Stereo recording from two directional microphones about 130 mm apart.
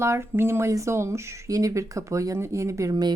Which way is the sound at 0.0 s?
20° right (ahead or behind).